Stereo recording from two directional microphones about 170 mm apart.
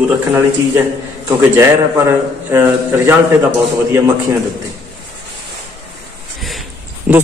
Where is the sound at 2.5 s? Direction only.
15° right (ahead or behind).